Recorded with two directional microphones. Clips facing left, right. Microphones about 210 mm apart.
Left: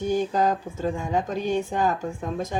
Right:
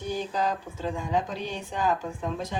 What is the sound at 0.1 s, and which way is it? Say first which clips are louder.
Speech: left 5 dB; 45° left (ahead or behind).